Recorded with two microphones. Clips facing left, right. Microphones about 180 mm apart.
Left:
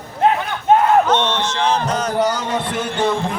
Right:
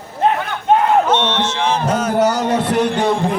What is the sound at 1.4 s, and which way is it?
Music, 5° right (ahead or behind).